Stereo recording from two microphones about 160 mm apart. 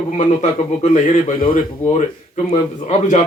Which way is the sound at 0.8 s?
50° left (ahead or behind).